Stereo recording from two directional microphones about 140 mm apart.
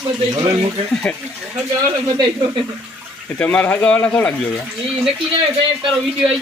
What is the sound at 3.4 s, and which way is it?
Speech, 10° left (ahead or behind).